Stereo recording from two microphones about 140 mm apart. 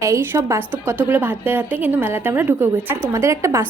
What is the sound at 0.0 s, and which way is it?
A woman's voice, 20° right (ahead or behind).